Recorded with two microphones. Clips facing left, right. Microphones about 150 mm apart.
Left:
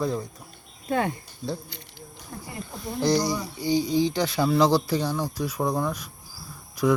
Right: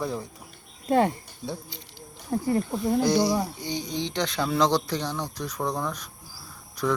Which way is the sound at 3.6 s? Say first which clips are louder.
Left 8 dB; 5° left (ahead or behind).